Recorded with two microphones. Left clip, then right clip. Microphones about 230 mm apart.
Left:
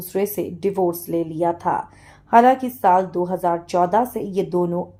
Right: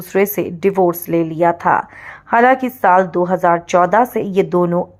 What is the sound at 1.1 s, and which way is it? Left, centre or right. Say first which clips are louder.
A woman's voice: right 7 dB; centre.